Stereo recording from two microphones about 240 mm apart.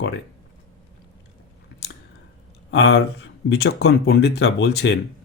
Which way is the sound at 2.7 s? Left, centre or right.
Left.